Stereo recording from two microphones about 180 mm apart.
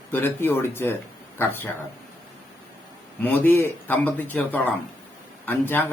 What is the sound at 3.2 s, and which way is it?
Speech, 10° left (ahead or behind).